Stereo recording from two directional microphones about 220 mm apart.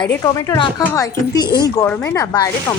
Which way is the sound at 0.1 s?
15° left (ahead or behind).